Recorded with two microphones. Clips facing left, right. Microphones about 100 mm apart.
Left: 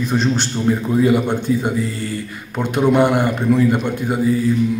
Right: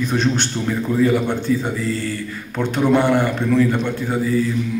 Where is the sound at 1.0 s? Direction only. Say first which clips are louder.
Left 1 dB; 15° left (ahead or behind).